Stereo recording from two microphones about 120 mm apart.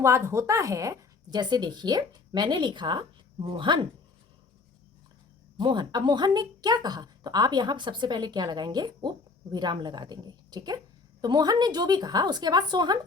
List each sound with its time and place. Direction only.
0.0 s a woman's voice: 25° right (ahead or behind); by 3.8 s 45° right (ahead or behind)
5.5 s a woman's voice: 40° right (ahead or behind)